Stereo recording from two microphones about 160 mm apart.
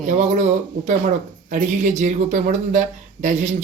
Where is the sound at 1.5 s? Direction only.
50° right (ahead or behind).